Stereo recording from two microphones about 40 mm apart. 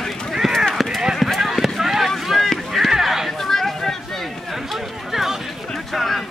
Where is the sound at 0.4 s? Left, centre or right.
Centre.